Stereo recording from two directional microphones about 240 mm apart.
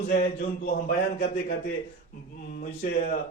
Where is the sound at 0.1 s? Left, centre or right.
Left.